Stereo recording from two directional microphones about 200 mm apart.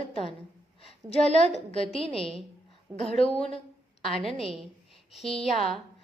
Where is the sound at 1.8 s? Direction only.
30° left (ahead or behind).